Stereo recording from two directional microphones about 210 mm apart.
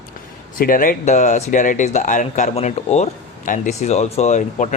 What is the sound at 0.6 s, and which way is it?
Speech, 40° left (ahead or behind).